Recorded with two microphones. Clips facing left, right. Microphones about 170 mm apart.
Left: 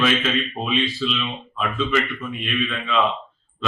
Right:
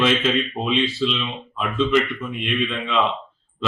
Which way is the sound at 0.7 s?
25° right (ahead or behind).